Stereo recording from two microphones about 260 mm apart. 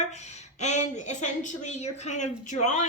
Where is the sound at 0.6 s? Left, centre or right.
Left.